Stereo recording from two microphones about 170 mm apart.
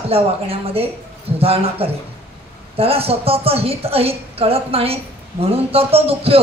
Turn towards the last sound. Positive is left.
turn(degrees=-35)  # may be behind; listen again after turning